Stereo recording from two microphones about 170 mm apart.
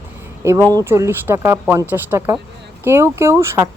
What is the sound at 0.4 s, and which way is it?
Speech, 20° right (ahead or behind).